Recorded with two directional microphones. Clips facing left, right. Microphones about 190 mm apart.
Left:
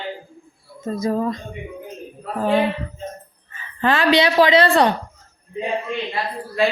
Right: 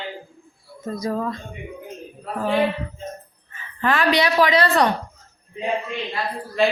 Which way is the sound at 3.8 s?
30° left (ahead or behind).